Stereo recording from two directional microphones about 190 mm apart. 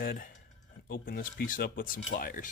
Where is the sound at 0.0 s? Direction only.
50° left (ahead or behind).